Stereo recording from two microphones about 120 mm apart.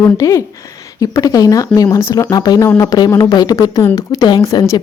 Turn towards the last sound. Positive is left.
turn(degrees=30)  # may be behind; listen again after turning